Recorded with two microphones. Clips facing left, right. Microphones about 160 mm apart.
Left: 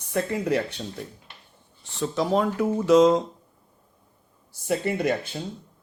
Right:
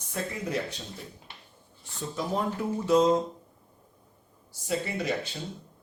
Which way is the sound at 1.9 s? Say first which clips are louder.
Left 7 dB; 90° left.